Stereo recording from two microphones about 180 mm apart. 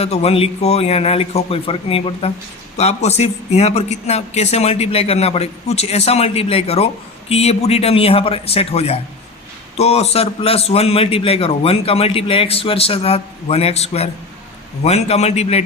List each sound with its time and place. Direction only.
0.0 s speech: 35° left (ahead or behind)